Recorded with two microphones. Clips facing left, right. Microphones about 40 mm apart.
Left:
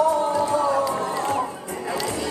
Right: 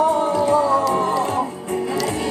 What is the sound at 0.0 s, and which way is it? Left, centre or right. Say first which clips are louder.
Music: right 3 dB; right.